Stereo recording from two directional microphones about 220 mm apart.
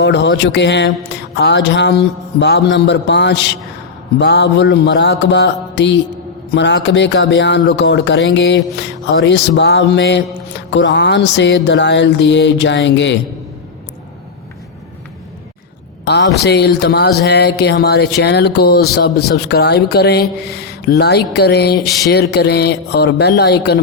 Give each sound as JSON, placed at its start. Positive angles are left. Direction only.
{"t": 0.0, "sound": "music", "side_deg": 55}
{"t": 16.0, "sound": "music", "side_deg": 50}